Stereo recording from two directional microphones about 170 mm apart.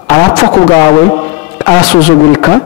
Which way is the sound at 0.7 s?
20° left (ahead or behind).